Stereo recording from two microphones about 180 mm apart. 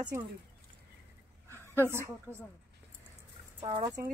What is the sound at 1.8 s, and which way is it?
Speech, 15° right (ahead or behind).